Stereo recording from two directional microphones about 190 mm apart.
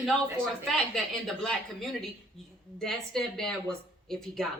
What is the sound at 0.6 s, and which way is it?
Speech, centre (ahead or behind).